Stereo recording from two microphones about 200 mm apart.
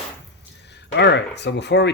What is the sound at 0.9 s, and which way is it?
Speech, 60° left (ahead or behind).